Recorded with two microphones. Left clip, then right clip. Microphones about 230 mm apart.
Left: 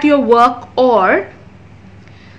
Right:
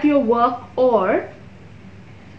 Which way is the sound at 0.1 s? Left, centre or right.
Left.